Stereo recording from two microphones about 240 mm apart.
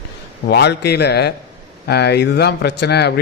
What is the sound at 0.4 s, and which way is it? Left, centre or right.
Speech, left.